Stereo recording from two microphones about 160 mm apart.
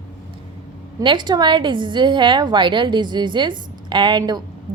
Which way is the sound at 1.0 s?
30° right (ahead or behind).